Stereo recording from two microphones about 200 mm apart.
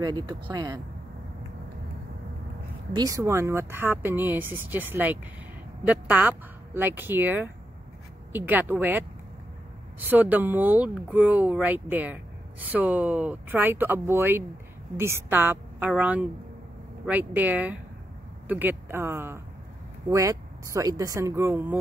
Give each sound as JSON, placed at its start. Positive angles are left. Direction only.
{"t": 0.0, "sound": "speech", "side_deg": -20}
{"t": 2.9, "sound": "speech", "side_deg": -20}